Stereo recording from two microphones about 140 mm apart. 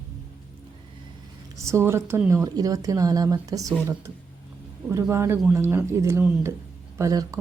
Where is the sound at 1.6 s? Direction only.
20° right (ahead or behind).